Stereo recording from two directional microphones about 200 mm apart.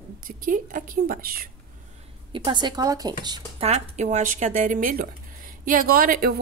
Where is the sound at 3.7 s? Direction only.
35° right (ahead or behind).